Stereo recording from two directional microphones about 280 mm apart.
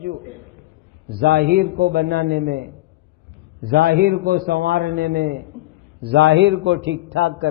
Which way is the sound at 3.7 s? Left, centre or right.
Right.